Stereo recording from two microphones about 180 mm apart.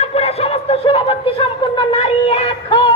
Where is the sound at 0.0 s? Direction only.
35° left (ahead or behind).